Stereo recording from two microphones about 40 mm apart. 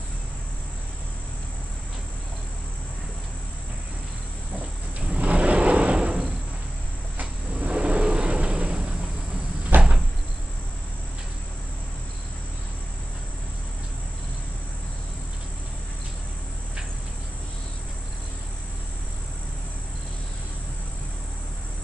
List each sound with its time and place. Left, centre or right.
4.6 s wild animals: right
7.2 s wild animals: right
9.7 s cricket: right